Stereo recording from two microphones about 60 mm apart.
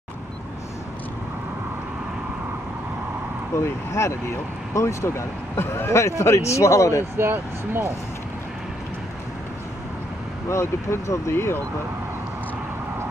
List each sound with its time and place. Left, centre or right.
3.5 s speech: left
7.2 s speech: right
10.5 s speech: left